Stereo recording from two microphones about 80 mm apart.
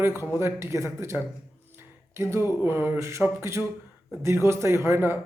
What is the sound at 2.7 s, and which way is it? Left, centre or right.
Speech, right.